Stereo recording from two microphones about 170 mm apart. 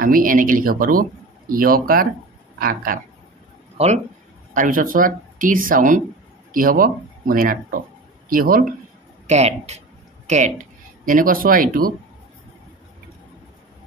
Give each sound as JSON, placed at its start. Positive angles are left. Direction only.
{"t": 0.0, "sound": "speech", "side_deg": -55}
{"t": 3.7, "sound": "speech", "side_deg": -40}
{"t": 4.6, "sound": "speech", "side_deg": -55}
{"t": 9.3, "sound": "speech", "side_deg": -40}
{"t": 11.1, "sound": "speech", "side_deg": -55}